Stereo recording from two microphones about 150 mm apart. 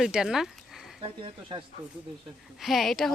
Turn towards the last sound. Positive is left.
turn(degrees=0)  # may be behind; listen again after turning